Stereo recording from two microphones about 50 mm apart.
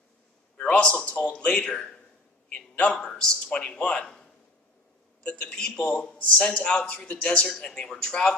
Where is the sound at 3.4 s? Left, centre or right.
Left.